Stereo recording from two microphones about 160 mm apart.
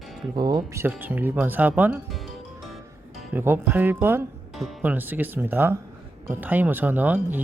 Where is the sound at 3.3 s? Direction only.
15° right (ahead or behind).